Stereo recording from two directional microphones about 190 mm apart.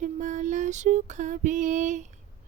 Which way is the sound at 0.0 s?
40° right (ahead or behind).